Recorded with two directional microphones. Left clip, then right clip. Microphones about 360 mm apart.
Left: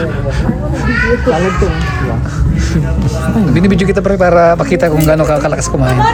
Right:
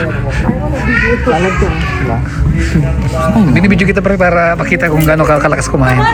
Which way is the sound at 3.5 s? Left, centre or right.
Centre.